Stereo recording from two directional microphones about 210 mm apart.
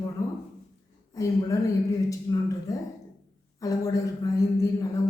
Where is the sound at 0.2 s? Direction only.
15° left (ahead or behind).